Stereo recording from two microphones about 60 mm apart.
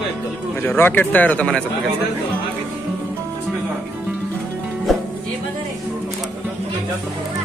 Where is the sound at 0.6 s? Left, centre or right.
Left.